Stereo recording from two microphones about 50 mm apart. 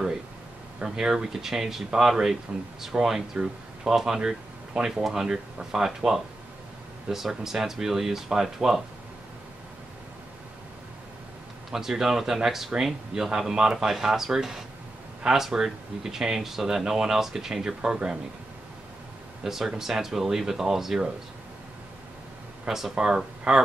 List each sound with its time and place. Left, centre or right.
0.8 s speech: centre
11.7 s speech: centre
19.4 s speech: centre
22.7 s speech: centre